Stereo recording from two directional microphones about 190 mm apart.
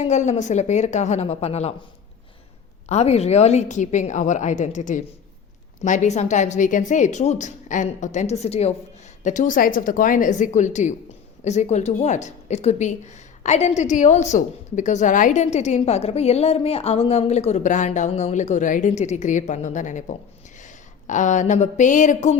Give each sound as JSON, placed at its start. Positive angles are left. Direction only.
{"t": 0.0, "sound": "a woman's voice", "side_deg": 35}
{"t": 2.9, "sound": "a woman's voice", "side_deg": 35}